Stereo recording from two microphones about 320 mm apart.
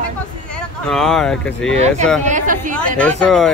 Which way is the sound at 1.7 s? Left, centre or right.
Right.